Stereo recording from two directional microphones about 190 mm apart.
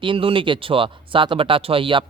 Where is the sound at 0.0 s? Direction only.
25° right (ahead or behind).